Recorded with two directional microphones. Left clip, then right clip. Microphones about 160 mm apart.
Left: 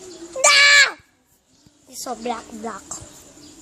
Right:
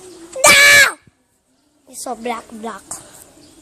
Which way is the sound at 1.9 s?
30° right (ahead or behind).